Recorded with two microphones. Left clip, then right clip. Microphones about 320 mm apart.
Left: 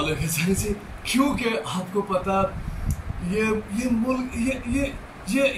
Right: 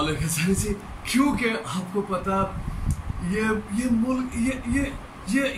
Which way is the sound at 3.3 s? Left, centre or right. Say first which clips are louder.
Left 1 dB; centre.